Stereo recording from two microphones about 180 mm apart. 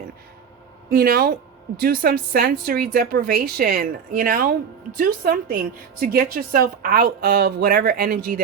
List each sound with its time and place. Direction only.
0.9 s a woman's voice: 55° right (ahead or behind)